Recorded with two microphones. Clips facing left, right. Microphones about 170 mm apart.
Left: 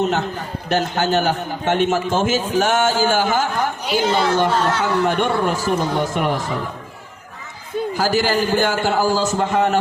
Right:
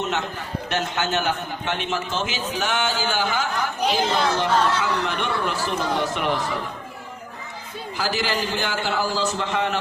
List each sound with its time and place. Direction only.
0.0 s a man's voice: 35° left (ahead or behind)
7.9 s a man's voice: 45° left (ahead or behind)